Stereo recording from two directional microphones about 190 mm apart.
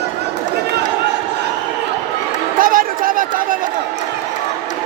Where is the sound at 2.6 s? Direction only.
45° right (ahead or behind).